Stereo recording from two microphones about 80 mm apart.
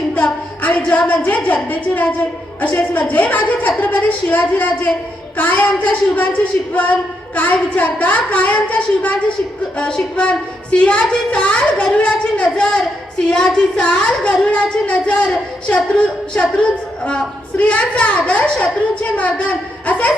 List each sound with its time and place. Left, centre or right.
0.1 s a woman's voice: left